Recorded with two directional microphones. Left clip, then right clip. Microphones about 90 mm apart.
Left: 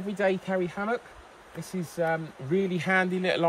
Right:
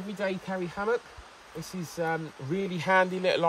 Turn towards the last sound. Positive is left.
turn(degrees=-45)  # may be behind; listen again after turning